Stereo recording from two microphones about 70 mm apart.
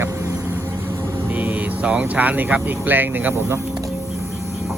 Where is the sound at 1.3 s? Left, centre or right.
Centre.